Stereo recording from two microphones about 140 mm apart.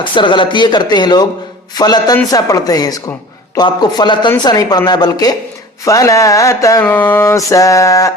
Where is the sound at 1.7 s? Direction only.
30° left (ahead or behind).